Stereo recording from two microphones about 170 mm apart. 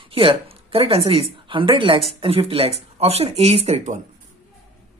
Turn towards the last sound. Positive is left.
turn(degrees=-45)  # may be behind; listen again after turning